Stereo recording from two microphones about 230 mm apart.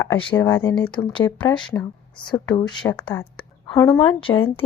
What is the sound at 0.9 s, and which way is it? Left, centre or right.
Speech, left.